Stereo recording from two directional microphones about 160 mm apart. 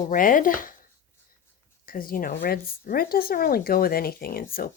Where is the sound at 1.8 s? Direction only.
60° left (ahead or behind).